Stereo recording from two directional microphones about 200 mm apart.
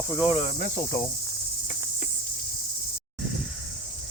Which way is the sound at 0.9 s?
10° left (ahead or behind).